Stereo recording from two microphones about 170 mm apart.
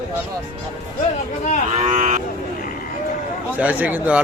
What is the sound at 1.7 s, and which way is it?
Cattle, 40° right (ahead or behind).